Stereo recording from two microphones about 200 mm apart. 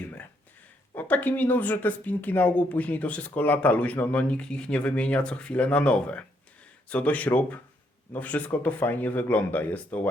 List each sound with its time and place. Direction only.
0.9 s speech: 10° left (ahead or behind)